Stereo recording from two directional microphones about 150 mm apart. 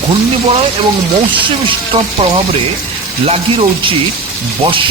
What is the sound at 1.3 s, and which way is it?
Speech, 35° right (ahead or behind).